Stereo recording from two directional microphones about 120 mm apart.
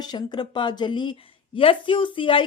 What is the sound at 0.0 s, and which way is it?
Speech, 35° left (ahead or behind).